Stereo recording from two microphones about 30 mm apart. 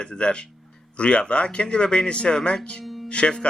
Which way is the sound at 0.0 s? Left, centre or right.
Left.